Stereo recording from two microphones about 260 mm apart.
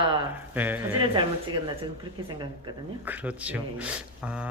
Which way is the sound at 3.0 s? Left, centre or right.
Centre.